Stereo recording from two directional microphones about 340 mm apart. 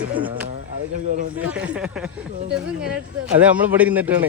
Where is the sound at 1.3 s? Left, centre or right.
Centre.